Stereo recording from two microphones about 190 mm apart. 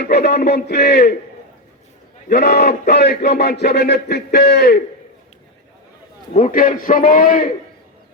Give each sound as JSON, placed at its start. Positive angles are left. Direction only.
{"t": 0.0, "sound": "a man's voice", "side_deg": 55}
{"t": 2.3, "sound": "a man's voice", "side_deg": 60}
{"t": 6.3, "sound": "a man's voice", "side_deg": 45}